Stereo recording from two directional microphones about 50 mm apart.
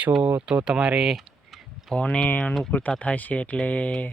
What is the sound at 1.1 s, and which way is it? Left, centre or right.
Tick, centre.